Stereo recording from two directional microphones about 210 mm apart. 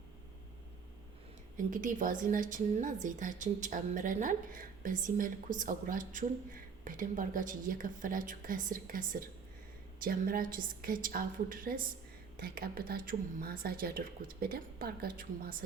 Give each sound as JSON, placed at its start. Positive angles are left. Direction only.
{"t": 1.7, "sound": "a woman's voice", "side_deg": -40}